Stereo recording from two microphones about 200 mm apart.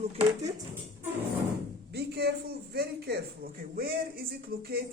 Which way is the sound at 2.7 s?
55° right (ahead or behind).